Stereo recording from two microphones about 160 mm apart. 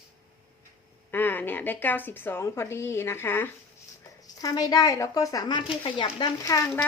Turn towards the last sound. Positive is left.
turn(degrees=20)  # may be behind; listen again after turning